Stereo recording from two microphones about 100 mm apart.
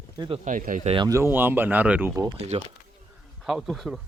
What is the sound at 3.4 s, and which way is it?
Speech, 5° right (ahead or behind).